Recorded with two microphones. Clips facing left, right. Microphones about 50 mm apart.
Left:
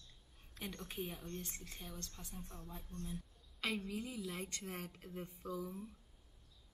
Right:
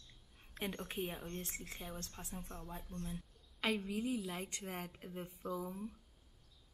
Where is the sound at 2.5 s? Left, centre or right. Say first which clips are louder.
Right 3 dB; right.